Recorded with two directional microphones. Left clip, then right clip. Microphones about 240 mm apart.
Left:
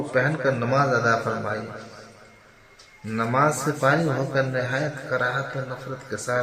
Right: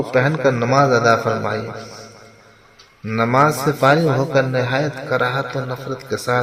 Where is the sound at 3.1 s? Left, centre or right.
Right.